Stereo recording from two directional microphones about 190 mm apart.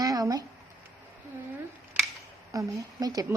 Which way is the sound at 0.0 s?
20° right (ahead or behind).